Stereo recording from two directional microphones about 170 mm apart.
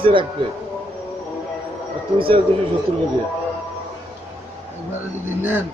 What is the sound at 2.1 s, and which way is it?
Speech, 30° right (ahead or behind).